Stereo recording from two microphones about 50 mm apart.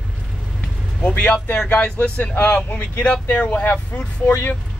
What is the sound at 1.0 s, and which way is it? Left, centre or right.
Speech, left.